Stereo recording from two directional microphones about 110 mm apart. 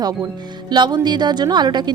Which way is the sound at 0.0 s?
35° right (ahead or behind).